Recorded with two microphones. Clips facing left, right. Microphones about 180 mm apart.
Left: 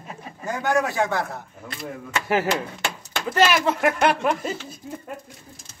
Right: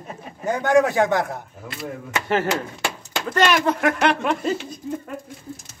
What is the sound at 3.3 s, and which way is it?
Speech, 5° left (ahead or behind).